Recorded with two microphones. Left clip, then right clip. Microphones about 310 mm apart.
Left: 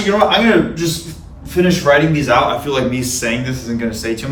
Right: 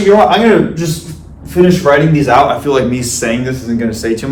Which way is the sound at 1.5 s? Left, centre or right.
Centre.